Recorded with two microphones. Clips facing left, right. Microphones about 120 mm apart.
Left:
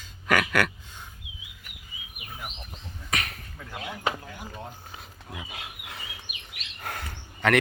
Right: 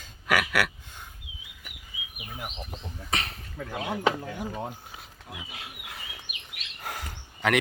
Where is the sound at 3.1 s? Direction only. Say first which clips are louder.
Even; 30° right (ahead or behind).